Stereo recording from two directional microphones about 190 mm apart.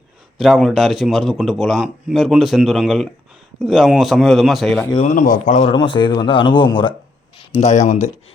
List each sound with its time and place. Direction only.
0.3 s a man's voice: centre (ahead or behind)
5.0 s speech: 45° left (ahead or behind)
5.7 s speech: 25° left (ahead or behind)
7.3 s speech: 35° left (ahead or behind)